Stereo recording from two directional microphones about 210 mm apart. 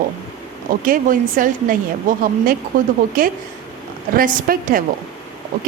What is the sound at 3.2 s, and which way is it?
A woman's voice, 40° right (ahead or behind).